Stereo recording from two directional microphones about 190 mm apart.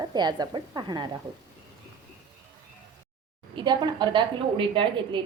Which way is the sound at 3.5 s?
25° right (ahead or behind).